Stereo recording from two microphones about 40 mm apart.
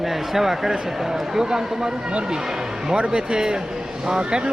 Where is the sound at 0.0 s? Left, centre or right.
Centre.